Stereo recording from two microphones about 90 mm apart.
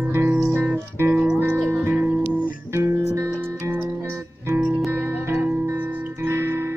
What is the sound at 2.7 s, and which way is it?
Music, 30° right (ahead or behind).